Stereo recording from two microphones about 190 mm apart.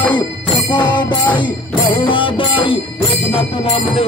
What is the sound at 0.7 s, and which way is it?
Music, 25° left (ahead or behind).